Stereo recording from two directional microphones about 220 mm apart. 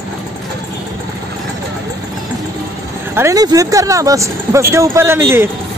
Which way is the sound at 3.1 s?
10° right (ahead or behind).